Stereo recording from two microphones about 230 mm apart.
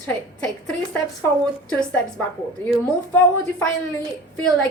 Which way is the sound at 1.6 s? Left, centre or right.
Centre.